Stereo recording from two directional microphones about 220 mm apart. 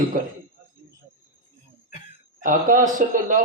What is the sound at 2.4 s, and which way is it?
A man's voice, 35° right (ahead or behind).